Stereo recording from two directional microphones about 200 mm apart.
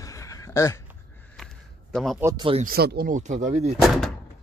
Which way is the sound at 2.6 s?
50° right (ahead or behind).